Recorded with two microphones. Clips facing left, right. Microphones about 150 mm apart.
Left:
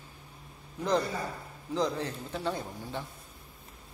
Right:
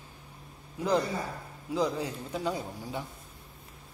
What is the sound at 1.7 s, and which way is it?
A man's voice, 10° right (ahead or behind).